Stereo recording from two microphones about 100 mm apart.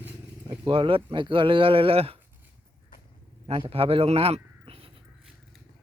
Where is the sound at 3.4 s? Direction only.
70° right (ahead or behind).